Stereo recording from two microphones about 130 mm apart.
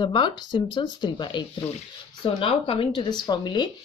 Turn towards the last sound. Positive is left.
turn(degrees=35)  # may be behind; listen again after turning